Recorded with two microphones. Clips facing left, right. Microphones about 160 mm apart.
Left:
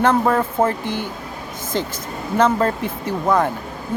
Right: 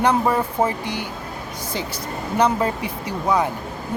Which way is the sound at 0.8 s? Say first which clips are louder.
Left 3 dB; 50° left (ahead or behind).